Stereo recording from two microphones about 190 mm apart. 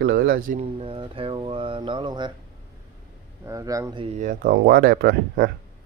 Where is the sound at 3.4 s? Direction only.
15° right (ahead or behind).